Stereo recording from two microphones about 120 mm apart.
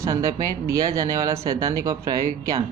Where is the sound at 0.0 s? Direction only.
25° right (ahead or behind).